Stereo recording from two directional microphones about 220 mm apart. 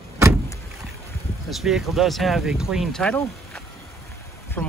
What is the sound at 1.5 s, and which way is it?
Speech, centre (ahead or behind).